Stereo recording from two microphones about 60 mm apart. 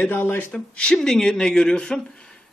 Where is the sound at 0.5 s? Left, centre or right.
Centre.